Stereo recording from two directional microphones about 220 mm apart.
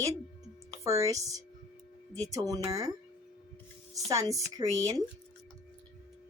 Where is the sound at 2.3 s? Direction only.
15° right (ahead or behind).